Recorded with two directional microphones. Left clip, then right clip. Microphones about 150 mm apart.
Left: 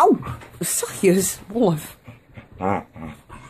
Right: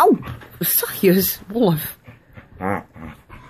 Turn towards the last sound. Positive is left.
turn(degrees=25)  # may be behind; listen again after turning